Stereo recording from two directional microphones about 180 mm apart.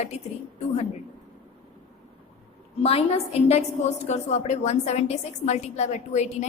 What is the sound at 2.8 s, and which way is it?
A woman's voice, 35° left (ahead or behind).